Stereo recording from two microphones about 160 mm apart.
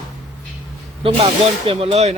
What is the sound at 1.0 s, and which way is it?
Speech, 35° right (ahead or behind).